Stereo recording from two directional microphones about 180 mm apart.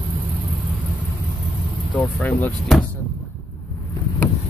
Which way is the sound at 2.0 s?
10° left (ahead or behind).